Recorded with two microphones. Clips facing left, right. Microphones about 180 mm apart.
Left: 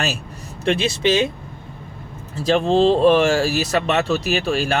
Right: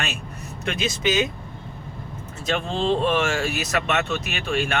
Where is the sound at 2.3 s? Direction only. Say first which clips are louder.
Left 10 dB; 35° left (ahead or behind).